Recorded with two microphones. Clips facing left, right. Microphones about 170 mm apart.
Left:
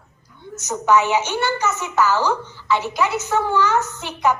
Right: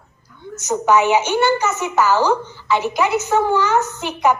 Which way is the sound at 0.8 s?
15° right (ahead or behind).